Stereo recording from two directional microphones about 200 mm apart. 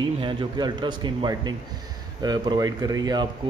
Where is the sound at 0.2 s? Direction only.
25° right (ahead or behind).